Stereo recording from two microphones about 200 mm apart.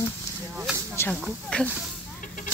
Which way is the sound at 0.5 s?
5° right (ahead or behind).